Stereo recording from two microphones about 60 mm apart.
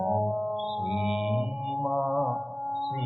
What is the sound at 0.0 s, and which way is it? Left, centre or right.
Music, centre.